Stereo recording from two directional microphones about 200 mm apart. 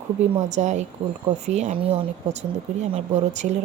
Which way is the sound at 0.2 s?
35° right (ahead or behind).